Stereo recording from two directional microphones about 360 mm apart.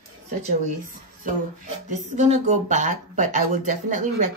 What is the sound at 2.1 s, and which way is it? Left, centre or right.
Speech, centre.